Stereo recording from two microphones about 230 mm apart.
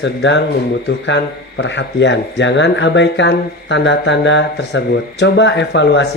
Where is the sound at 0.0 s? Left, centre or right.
Left.